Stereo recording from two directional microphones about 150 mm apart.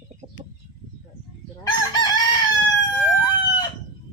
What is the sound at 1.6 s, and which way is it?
Chicken, 30° left (ahead or behind).